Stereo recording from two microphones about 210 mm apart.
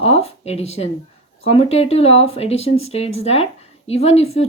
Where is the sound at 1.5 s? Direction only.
30° left (ahead or behind).